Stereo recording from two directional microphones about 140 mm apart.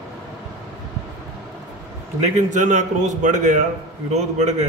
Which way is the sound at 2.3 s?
60° right (ahead or behind).